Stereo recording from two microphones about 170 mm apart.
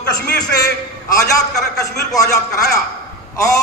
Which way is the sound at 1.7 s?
20° left (ahead or behind).